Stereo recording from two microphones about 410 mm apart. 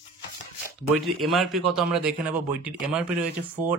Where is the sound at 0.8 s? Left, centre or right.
Centre.